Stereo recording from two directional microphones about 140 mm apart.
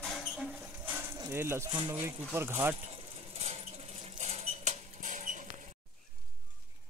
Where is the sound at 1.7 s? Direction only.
35° right (ahead or behind).